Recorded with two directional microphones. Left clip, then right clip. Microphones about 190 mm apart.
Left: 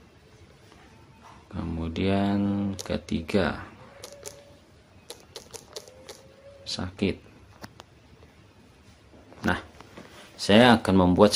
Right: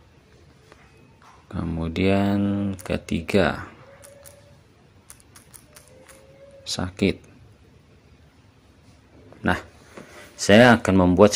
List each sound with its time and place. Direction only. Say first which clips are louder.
1.5 s speech: right 4 dB; 25° right (ahead or behind)
2.4 s speech: right 3 dB; 5° right (ahead or behind)
6.6 s speech: right 5 dB; 25° right (ahead or behind)
9.4 s a sound: right 4 dB; 20° right (ahead or behind)
10.4 s speech: right 4 dB; 20° right (ahead or behind)